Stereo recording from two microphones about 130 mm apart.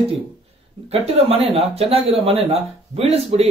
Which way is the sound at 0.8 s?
50° right (ahead or behind).